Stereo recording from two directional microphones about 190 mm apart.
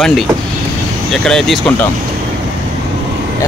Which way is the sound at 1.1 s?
Centre (ahead or behind).